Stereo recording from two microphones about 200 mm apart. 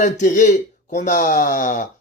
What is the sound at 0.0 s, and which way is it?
Speech, 40° left (ahead or behind).